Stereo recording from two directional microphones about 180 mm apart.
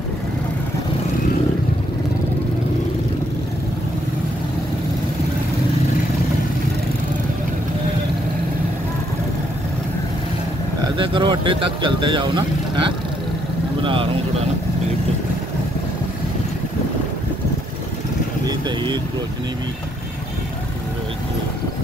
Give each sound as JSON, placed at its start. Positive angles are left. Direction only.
{"t": 11.0, "sound": "speech", "side_deg": -30}